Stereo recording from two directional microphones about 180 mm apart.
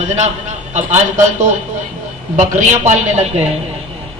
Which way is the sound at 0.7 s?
40° right (ahead or behind).